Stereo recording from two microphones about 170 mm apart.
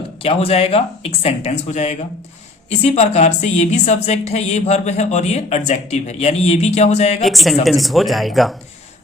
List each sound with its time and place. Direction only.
0.2 s speech: 35° left (ahead or behind)
7.3 s speech: centre (ahead or behind)